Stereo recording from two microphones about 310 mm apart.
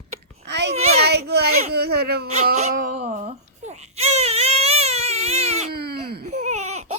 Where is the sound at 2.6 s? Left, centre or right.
Right.